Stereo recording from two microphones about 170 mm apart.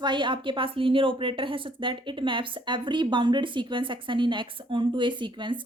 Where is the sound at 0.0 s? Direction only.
25° right (ahead or behind).